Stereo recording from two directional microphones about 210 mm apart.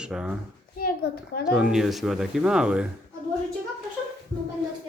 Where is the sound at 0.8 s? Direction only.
45° left (ahead or behind).